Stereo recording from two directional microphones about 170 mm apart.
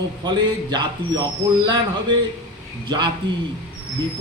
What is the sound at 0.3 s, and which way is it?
Speech, 25° right (ahead or behind).